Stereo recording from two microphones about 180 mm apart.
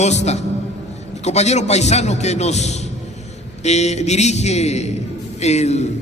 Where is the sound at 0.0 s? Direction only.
40° left (ahead or behind).